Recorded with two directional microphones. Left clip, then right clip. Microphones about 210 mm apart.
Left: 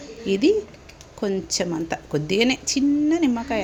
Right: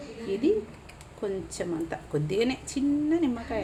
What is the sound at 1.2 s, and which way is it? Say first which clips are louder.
Speech: left 7 dB; 40° left (ahead or behind).